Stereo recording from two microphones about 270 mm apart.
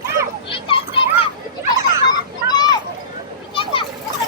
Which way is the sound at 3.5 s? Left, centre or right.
Centre.